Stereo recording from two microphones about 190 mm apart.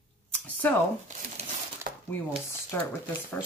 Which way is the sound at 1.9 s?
50° right (ahead or behind).